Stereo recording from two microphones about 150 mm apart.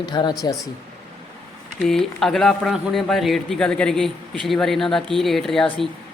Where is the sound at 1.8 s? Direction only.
Centre (ahead or behind).